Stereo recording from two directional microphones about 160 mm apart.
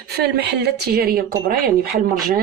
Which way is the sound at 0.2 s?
90° right.